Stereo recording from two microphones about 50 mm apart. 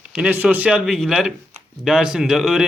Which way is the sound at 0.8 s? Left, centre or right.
Centre.